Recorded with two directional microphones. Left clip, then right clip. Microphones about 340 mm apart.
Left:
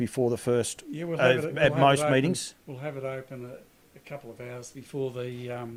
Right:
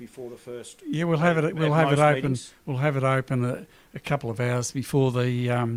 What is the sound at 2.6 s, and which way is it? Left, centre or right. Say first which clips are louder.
Speech: right 12 dB; right.